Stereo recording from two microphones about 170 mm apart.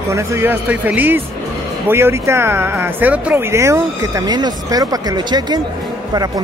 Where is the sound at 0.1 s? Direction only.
15° right (ahead or behind).